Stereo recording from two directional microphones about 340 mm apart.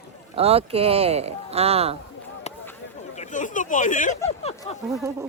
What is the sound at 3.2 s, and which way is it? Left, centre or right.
Speech, left.